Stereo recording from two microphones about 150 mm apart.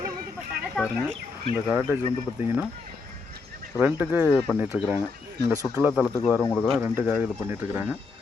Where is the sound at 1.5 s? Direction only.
15° right (ahead or behind).